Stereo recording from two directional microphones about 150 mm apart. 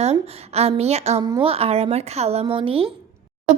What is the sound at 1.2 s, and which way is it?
Speech, 30° right (ahead or behind).